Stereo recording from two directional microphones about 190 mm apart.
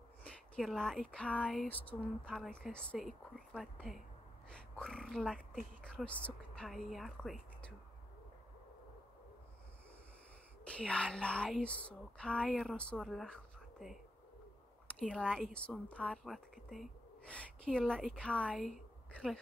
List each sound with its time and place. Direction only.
0.2 s speech: 5° left (ahead or behind)
10.6 s speech: 5° left (ahead or behind)
15.0 s a woman's voice: 5° left (ahead or behind)